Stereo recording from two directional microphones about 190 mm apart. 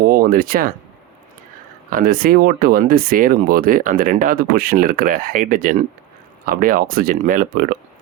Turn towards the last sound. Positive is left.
turn(degrees=-45)  # may be behind; listen again after turning